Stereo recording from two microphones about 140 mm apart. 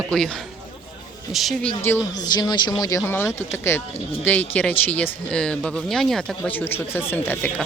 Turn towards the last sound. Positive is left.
turn(degrees=15)  # may be behind; listen again after turning